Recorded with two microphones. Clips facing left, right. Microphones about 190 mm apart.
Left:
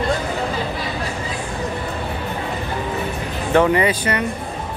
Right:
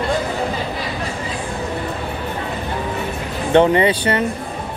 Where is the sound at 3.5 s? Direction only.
25° right (ahead or behind).